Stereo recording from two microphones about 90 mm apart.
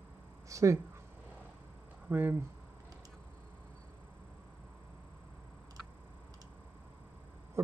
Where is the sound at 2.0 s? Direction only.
20° right (ahead or behind).